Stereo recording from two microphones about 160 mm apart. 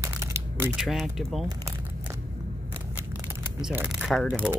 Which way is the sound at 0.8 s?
Centre (ahead or behind).